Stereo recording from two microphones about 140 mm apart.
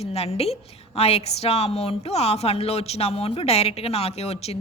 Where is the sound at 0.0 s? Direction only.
45° left (ahead or behind).